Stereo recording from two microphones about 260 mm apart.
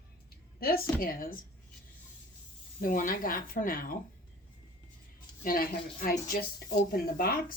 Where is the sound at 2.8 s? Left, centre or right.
Left.